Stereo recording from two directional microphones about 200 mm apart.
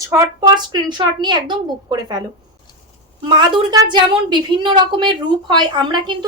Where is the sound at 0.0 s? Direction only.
20° right (ahead or behind).